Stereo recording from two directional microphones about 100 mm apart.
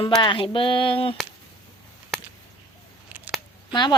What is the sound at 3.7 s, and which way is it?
Speech, 45° left (ahead or behind).